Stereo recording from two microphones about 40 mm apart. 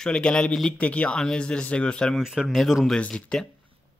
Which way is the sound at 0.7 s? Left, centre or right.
Left.